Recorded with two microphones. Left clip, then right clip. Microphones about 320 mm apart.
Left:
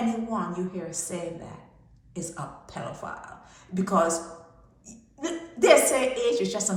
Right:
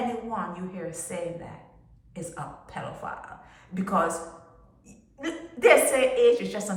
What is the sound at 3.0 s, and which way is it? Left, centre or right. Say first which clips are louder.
Speech: right 1 dB; centre.